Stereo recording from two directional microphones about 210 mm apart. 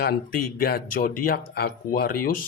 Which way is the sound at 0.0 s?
45° left (ahead or behind).